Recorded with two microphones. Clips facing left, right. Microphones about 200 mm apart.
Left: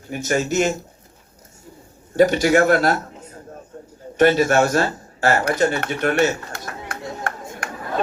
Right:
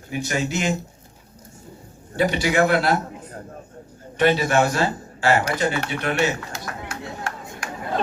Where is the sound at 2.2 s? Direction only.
45° left (ahead or behind).